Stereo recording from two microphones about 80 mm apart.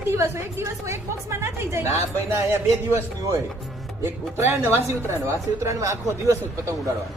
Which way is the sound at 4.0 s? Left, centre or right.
Right.